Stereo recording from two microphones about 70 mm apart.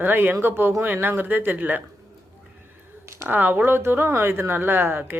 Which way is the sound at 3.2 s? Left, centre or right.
Right.